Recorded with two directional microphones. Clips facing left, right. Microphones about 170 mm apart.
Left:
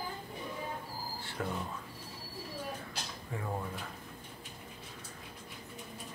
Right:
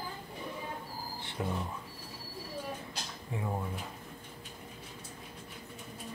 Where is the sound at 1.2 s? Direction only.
20° right (ahead or behind).